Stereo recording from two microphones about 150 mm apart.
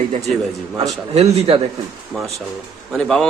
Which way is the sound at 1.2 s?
40° right (ahead or behind).